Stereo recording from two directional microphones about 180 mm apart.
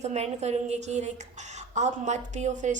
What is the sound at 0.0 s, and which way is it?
A woman's voice, 40° right (ahead or behind).